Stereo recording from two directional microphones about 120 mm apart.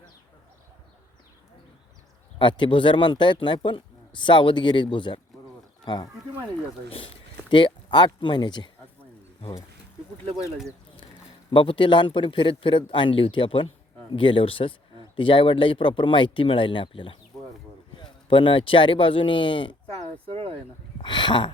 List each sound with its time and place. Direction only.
2.4 s speech: 45° left (ahead or behind)
7.5 s speech: 40° left (ahead or behind)
11.5 s speech: 45° left (ahead or behind)
19.9 s a sound: 55° right (ahead or behind)
21.0 s speech: 40° left (ahead or behind)